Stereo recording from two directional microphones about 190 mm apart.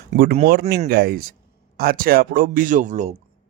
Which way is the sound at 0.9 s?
55° right (ahead or behind).